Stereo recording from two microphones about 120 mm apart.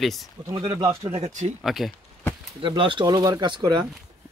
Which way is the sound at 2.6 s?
45° right (ahead or behind).